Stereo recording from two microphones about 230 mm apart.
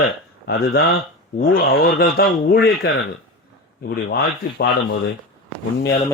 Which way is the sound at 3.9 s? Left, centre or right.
Left.